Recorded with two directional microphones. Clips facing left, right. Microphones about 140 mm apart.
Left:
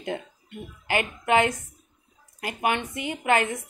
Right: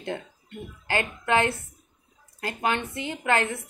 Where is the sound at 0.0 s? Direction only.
15° left (ahead or behind).